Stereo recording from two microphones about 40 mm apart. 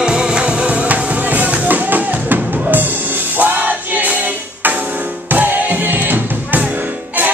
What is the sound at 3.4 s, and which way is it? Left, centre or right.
Music, right.